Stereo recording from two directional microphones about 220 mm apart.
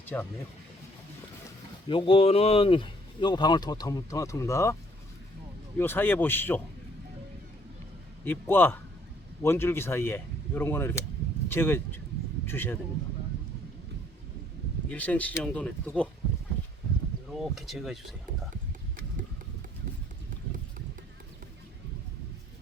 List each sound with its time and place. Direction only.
0.1 s speech: 10° left (ahead or behind)
1.9 s speech: 25° left (ahead or behind)
8.2 s speech: 10° left (ahead or behind)
14.8 s speech: 5° left (ahead or behind)
17.5 s speech: centre (ahead or behind)